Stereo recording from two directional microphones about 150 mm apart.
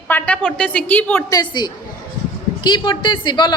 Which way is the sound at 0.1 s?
10° left (ahead or behind).